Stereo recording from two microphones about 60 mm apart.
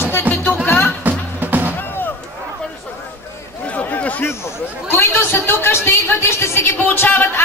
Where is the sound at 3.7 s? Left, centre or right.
Left.